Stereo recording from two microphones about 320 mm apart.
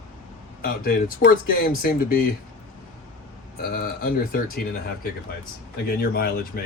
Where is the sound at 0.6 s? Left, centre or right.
Left.